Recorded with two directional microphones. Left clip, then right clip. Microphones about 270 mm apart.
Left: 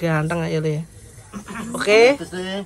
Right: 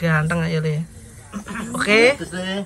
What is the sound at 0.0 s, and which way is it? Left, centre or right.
Speech, left.